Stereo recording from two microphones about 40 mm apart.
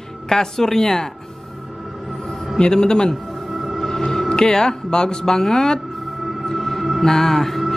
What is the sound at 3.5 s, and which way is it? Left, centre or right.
Music, centre.